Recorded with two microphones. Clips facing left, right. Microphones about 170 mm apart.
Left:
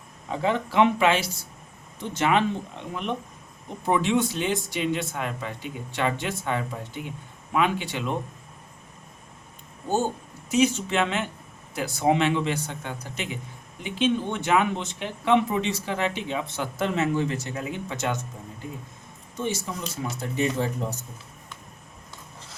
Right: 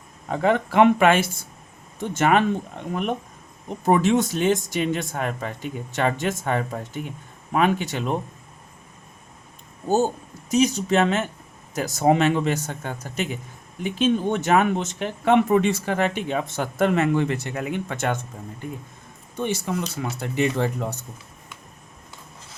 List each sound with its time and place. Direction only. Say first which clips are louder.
0.3 s speech: right 4 dB; 55° right (ahead or behind)
10.5 s speech: right 3 dB; 40° right (ahead or behind)
19.4 s speech: right 4 dB; 65° right (ahead or behind)